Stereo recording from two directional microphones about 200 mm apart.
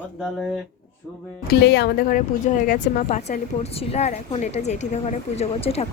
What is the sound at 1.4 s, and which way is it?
A woman's voice, 55° left (ahead or behind).